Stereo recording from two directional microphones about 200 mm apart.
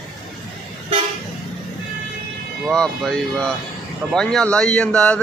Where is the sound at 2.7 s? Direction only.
5° left (ahead or behind).